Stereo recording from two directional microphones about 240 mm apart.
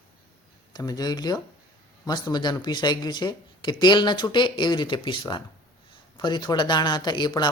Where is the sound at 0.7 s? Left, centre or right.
Centre.